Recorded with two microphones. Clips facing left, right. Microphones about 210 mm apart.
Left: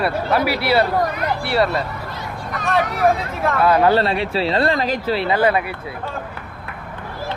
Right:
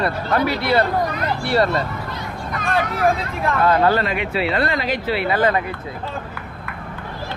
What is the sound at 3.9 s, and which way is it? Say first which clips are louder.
Speech: left 3 dB; 35° left (ahead or behind).